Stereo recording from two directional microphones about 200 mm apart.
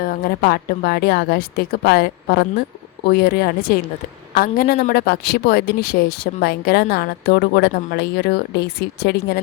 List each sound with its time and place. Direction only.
0.0 s speech: 50° left (ahead or behind)